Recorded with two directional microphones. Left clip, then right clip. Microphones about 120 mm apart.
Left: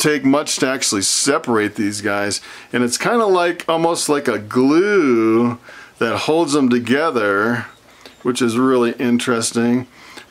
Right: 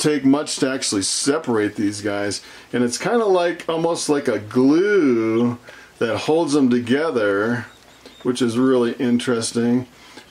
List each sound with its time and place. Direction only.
0.0 s speech: 40° left (ahead or behind)